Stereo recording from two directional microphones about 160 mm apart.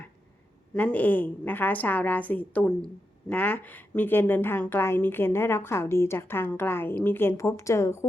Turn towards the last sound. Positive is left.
turn(degrees=15)  # may be behind; listen again after turning